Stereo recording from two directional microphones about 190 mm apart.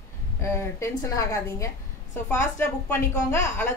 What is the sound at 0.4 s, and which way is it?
Speech, 15° left (ahead or behind).